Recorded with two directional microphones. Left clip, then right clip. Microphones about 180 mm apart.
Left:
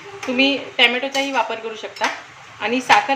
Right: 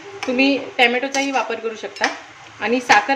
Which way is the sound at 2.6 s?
30° right (ahead or behind).